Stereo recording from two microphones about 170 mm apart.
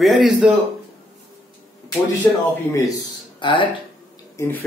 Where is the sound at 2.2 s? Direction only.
15° left (ahead or behind); by 3.8 s 30° left (ahead or behind).